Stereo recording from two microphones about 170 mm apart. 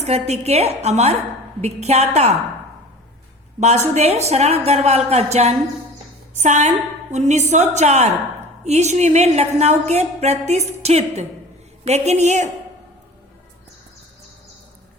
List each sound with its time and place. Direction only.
0.0 s a woman's voice: 40° right (ahead or behind)
3.9 s a woman's voice: 40° right (ahead or behind)